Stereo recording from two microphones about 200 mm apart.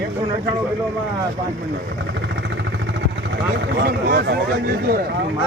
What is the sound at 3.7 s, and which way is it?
Speech, 55° right (ahead or behind).